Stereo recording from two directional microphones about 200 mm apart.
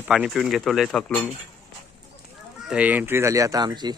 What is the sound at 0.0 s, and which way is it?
Speech, 5° right (ahead or behind).